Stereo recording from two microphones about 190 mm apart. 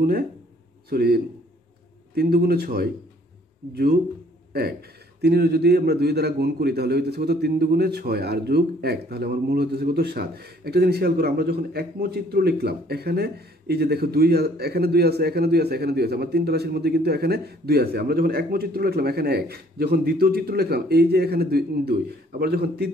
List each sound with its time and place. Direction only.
0.8 s a man's voice: 55° right (ahead or behind)